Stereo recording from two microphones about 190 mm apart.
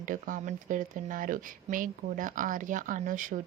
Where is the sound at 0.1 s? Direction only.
45° right (ahead or behind).